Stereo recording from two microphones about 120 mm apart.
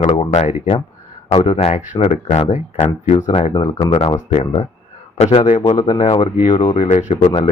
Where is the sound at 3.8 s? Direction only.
50° left (ahead or behind); by 5.7 s 70° left (ahead or behind).